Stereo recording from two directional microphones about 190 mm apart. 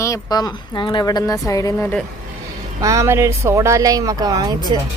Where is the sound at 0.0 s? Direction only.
20° left (ahead or behind).